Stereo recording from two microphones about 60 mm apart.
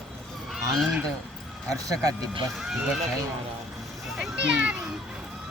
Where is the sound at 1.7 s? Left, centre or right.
Right.